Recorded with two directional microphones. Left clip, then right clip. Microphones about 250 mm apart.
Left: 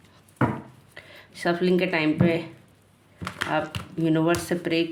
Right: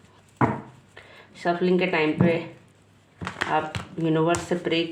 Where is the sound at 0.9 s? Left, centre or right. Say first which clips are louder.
Left 4 dB; left.